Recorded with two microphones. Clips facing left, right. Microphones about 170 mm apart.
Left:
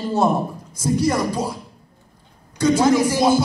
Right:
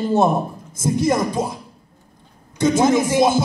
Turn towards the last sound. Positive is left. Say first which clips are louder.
# even
turn(degrees=-25)  # may be behind; listen again after turning